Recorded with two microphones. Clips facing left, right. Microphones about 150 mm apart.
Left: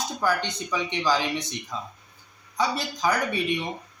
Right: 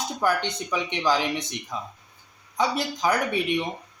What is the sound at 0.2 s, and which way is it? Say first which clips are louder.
Speech: right 2 dB; 15° right (ahead or behind).